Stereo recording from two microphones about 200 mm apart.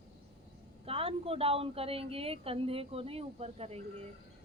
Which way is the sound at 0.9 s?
30° right (ahead or behind).